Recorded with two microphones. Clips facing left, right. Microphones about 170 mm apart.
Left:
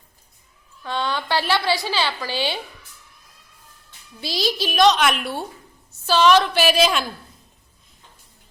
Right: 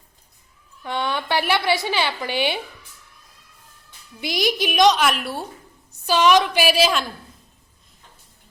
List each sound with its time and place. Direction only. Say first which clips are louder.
0.9 s a woman's voice: even; 20° right (ahead or behind)
4.2 s a woman's voice: right 2 dB; 20° right (ahead or behind)
4.9 s a woman's voice: even; centre (ahead or behind)
6.1 s a woman's voice: left 1 dB; 15° right (ahead or behind)